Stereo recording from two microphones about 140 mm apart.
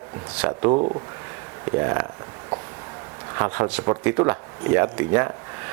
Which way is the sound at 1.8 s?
20° right (ahead or behind).